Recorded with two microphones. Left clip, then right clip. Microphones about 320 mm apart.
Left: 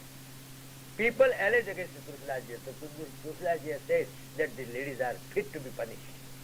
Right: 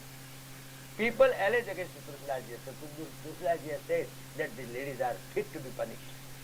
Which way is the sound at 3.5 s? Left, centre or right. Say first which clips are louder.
Left 2 dB; left.